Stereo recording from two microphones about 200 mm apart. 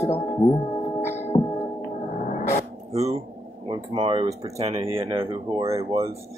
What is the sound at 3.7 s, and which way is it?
Speech, 25° right (ahead or behind).